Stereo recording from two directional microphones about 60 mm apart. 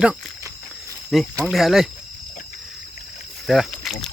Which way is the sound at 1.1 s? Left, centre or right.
Centre.